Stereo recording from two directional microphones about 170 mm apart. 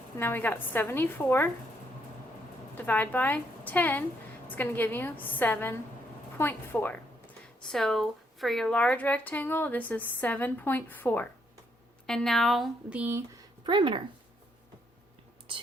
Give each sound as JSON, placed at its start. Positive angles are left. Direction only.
{"t": 0.2, "sound": "a woman's voice", "side_deg": 15}
{"t": 2.7, "sound": "a woman's voice", "side_deg": 10}
{"t": 13.7, "sound": "speech", "side_deg": -30}